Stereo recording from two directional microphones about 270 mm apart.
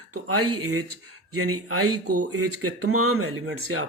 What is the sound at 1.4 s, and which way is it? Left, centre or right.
Speech, right.